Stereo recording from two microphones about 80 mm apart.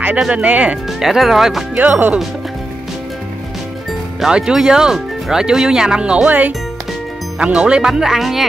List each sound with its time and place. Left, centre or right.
0.2 s speech: centre
0.8 s speech: centre
1.8 s speech: right
4.2 s speech: centre